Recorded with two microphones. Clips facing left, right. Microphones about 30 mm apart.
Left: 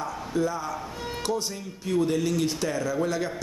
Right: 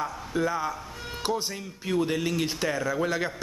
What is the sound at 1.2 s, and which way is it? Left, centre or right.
A man's voice, right.